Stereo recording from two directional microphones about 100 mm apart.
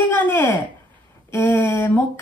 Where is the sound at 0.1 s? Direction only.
20° left (ahead or behind).